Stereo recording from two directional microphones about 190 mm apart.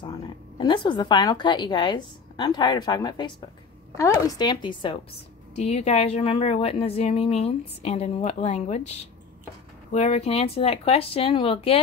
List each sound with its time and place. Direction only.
0.6 s a woman's voice: 25° left (ahead or behind)